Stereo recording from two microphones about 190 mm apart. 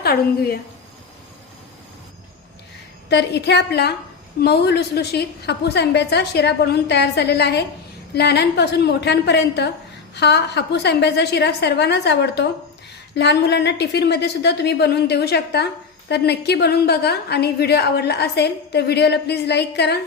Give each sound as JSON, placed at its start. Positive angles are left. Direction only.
{"t": 0.0, "sound": "a woman's voice", "side_deg": 55}
{"t": 3.1, "sound": "a woman's voice", "side_deg": 65}